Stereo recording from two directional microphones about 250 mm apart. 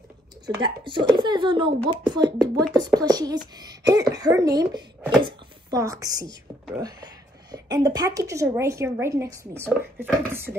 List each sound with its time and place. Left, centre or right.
0.6 s speech: centre
6.2 s speech: centre
7.5 s speech: centre